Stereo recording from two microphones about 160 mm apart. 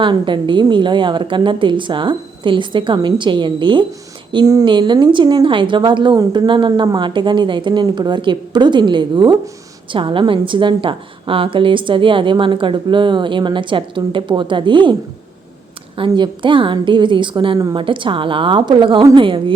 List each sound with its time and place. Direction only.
0.0 s a woman's voice: 30° right (ahead or behind)
16.0 s a woman's voice: 30° right (ahead or behind)